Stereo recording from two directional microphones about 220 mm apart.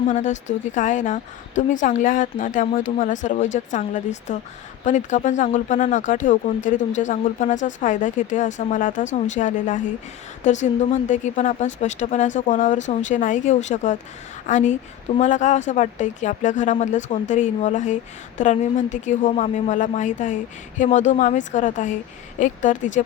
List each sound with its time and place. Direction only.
0.1 s a woman's voice: 35° left (ahead or behind)